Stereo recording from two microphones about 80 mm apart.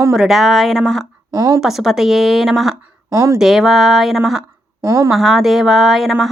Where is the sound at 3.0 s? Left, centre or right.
Right.